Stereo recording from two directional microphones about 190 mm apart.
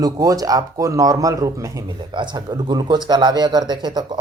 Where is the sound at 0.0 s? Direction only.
20° right (ahead or behind).